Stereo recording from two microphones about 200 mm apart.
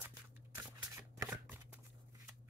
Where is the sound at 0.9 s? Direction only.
10° right (ahead or behind).